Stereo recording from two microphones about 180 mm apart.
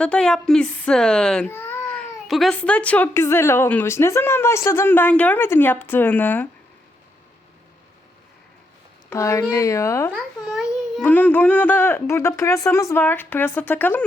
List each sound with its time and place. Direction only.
0.0 s speech: 5° left (ahead or behind)
9.0 s speech: 15° left (ahead or behind)
10.1 s babbling: 5° right (ahead or behind)
11.0 s speech: 10° left (ahead or behind)